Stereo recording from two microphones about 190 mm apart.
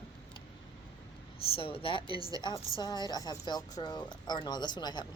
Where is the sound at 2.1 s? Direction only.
20° right (ahead or behind).